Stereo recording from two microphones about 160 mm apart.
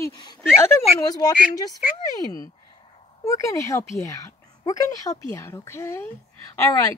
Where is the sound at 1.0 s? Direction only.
25° left (ahead or behind).